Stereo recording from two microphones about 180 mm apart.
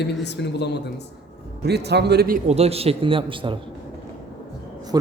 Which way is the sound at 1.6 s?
65° right (ahead or behind).